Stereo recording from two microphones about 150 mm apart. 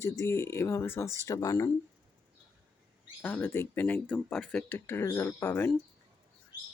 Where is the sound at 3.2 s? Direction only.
10° left (ahead or behind).